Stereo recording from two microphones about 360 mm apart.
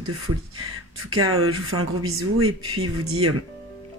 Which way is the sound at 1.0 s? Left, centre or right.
Right.